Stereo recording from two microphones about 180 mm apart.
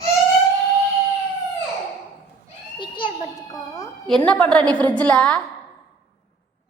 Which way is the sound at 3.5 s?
20° left (ahead or behind).